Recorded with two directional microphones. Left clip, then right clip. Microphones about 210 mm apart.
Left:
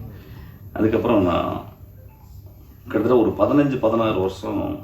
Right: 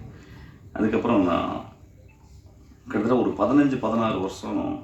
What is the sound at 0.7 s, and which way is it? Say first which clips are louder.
Speech: left 4 dB; 50° right (ahead or behind).